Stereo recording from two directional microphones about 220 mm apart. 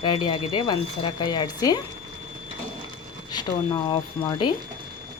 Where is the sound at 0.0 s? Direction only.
20° left (ahead or behind).